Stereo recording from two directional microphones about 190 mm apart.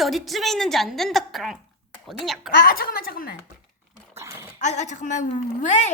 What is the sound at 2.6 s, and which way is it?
Speech, 50° left (ahead or behind).